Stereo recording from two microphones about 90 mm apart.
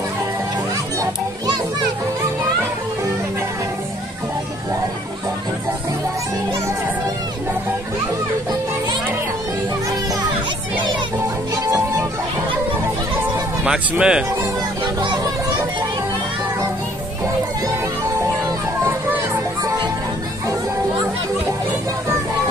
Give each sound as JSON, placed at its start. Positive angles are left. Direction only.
{"t": 11.5, "sound": "music", "side_deg": -40}
{"t": 13.7, "sound": "speech", "side_deg": -10}